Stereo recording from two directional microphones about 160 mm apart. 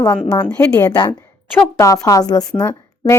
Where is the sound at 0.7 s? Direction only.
20° left (ahead or behind).